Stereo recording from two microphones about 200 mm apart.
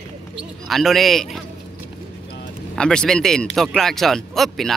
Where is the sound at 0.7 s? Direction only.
Centre (ahead or behind).